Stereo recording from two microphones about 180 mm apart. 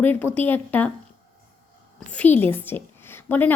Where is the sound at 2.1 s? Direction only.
10° left (ahead or behind).